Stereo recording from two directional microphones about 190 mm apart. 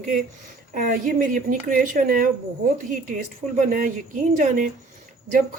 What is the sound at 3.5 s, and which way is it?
A woman's voice, 45° right (ahead or behind).